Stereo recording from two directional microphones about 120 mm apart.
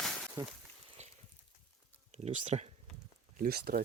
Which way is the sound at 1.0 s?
65° right (ahead or behind).